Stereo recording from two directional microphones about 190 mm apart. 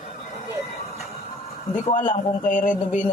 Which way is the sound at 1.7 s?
40° left (ahead or behind).